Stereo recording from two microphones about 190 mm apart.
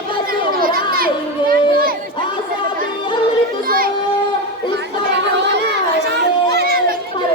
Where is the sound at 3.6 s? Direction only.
50° right (ahead or behind).